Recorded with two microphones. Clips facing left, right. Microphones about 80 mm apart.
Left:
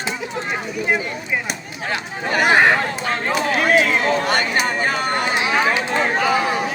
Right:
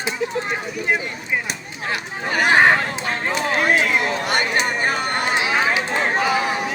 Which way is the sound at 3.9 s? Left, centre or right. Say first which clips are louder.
Left 2 dB; centre.